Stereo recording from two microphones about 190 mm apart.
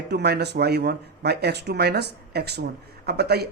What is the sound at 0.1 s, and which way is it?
Speech, 60° right (ahead or behind).